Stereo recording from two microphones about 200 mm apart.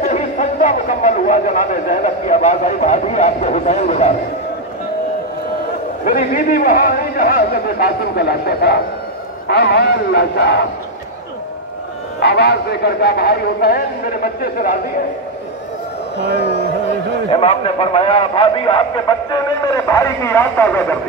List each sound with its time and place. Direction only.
0.0 s speech: 40° left (ahead or behind)
6.0 s a man's voice: 45° left (ahead or behind)
12.2 s a man's voice: 55° left (ahead or behind)
17.3 s a man's voice: 30° left (ahead or behind); by 20.8 s 10° left (ahead or behind)